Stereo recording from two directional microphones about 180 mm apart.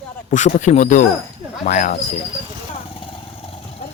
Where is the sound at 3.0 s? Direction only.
30° left (ahead or behind).